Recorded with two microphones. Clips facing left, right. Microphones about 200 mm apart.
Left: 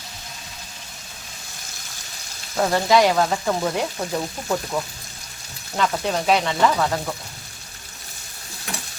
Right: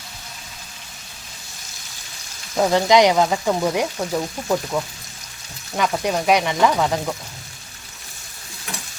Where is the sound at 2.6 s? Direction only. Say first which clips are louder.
Right 3 dB; 15° right (ahead or behind).